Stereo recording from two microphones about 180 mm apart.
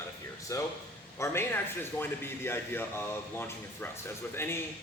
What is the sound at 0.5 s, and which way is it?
Speech, 15° left (ahead or behind).